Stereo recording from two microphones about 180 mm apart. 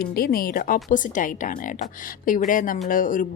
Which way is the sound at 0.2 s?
55° left (ahead or behind).